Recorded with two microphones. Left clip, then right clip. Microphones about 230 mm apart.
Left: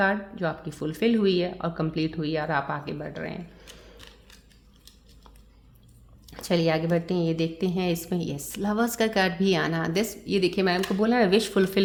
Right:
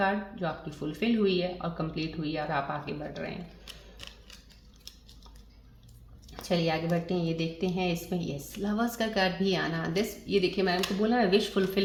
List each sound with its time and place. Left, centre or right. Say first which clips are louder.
0.0 s a woman's voice: left 4 dB; left
4.0 s scissors: right 6 dB; centre
6.4 s a woman's voice: left 5 dB; left